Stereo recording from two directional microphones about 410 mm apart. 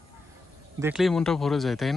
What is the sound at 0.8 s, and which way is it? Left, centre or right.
Speech, centre.